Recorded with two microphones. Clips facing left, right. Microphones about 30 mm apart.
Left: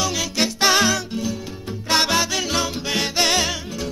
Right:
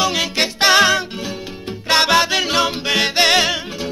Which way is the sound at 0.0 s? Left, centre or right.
Right.